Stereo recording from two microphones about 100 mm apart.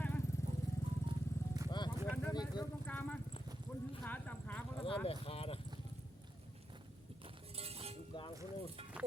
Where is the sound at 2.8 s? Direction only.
15° left (ahead or behind).